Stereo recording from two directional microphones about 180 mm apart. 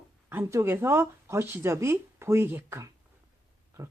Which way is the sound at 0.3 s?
15° right (ahead or behind).